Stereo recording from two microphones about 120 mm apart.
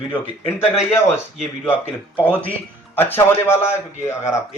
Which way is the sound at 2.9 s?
20° left (ahead or behind).